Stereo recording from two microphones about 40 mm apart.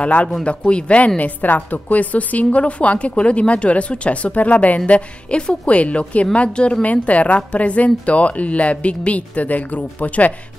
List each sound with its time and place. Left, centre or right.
0.0 s a woman's voice: left